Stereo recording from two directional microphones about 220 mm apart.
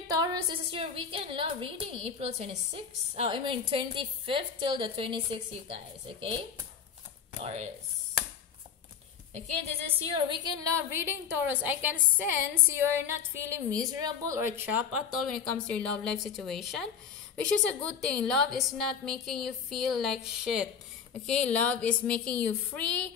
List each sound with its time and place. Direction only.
0.1 s a woman's voice: 20° right (ahead or behind)
7.3 s a woman's voice: 30° right (ahead or behind)
9.3 s a woman's voice: 30° right (ahead or behind); by 14.9 s 10° right (ahead or behind)
15.6 s a woman's voice: 5° left (ahead or behind)